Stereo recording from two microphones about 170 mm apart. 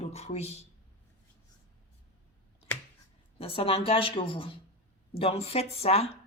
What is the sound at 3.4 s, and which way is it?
A woman's voice, 30° left (ahead or behind).